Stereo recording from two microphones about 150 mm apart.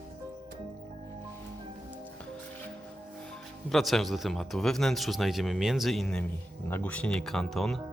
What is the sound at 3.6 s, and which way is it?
Speech, centre (ahead or behind).